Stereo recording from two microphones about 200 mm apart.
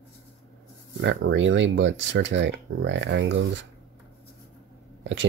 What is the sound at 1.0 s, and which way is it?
Speech, 65° right (ahead or behind).